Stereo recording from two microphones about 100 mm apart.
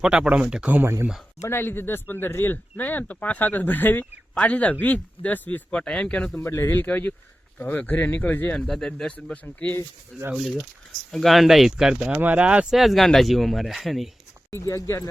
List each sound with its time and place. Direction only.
0.0 s speech: 10° right (ahead or behind)
1.4 s speech: 25° left (ahead or behind)
6.4 s speech: 30° left (ahead or behind)
8.5 s speech: 5° left (ahead or behind)
10.3 s speech: centre (ahead or behind)
12.7 s speech: centre (ahead or behind)
14.5 s speech: 30° left (ahead or behind)